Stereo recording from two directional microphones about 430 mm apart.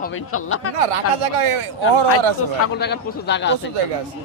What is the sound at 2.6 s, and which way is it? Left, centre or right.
Speech, left.